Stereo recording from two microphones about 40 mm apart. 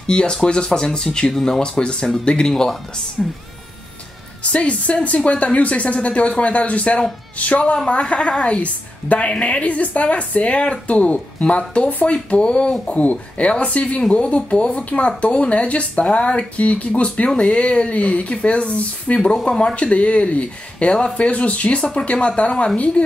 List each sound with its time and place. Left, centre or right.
0.0 s a woman's voice: left
1.3 s speech: centre
1.6 s a woman's voice: left
2.5 s speech: centre
3.2 s speech: centre
4.4 s speech: left
7.7 s a woman's voice: left
12.8 s speech: left